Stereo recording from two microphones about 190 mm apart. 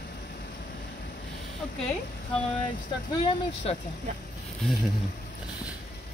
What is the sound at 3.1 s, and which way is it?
Speech, 30° left (ahead or behind).